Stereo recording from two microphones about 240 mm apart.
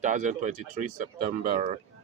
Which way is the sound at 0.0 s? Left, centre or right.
Right.